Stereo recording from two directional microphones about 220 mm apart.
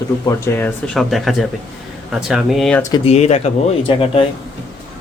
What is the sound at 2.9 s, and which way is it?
Speech, 25° left (ahead or behind).